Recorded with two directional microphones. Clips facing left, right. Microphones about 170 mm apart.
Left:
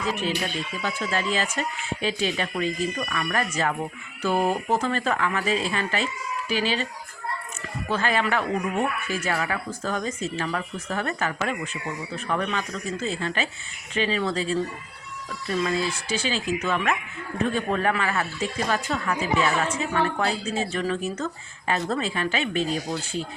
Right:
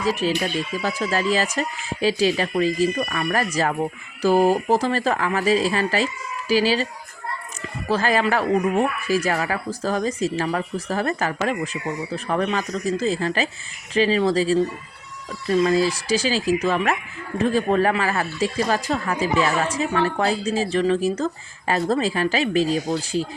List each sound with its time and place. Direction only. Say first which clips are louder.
0.0 s speech: right 5 dB; 35° right (ahead or behind)
7.9 s speech: right 4 dB; 35° right (ahead or behind)